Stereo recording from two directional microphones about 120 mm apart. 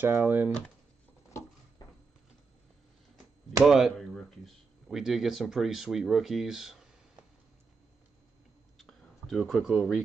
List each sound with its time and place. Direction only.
0.0 s speech: 15° right (ahead or behind)
1.8 s a sound: 35° left (ahead or behind)
3.6 s speech: centre (ahead or behind)
8.7 s clicking: 5° left (ahead or behind)